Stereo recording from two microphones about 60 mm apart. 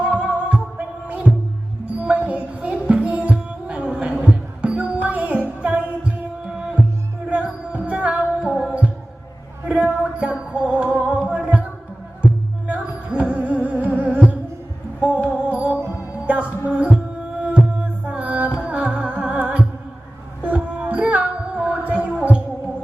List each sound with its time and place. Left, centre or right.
0.1 s music: right
7.3 s music: centre
9.6 s a sound: centre
10.5 s music: right